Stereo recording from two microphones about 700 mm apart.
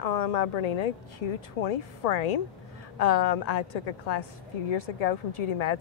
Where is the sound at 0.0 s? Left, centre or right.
Left.